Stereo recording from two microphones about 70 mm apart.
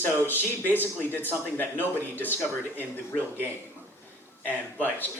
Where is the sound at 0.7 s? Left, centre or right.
Left.